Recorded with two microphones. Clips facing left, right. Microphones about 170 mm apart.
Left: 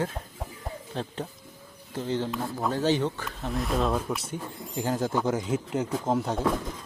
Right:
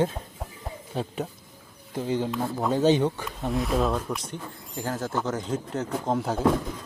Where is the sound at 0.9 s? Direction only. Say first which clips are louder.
Right 4 dB; 10° right (ahead or behind).